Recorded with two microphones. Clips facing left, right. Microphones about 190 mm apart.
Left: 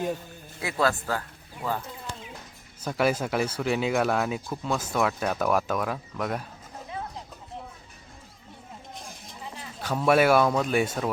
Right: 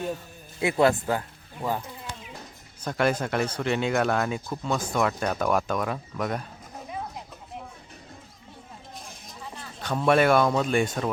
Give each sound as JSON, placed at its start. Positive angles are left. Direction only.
{"t": 0.6, "sound": "speech", "side_deg": -20}
{"t": 2.8, "sound": "speech", "side_deg": 5}
{"t": 9.8, "sound": "speech", "side_deg": 5}